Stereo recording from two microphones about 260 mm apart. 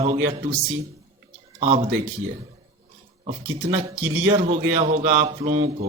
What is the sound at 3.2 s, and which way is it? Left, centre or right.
A man's voice, right.